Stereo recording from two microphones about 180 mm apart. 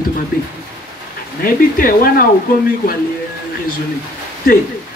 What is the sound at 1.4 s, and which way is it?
Speech, 55° left (ahead or behind).